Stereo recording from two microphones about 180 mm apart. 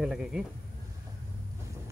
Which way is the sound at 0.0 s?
5° right (ahead or behind).